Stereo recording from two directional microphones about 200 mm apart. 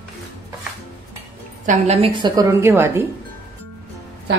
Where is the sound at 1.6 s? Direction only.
30° right (ahead or behind); by 3.0 s 10° right (ahead or behind).